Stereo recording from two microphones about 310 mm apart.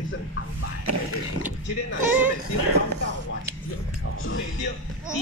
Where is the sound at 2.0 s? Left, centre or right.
Centre.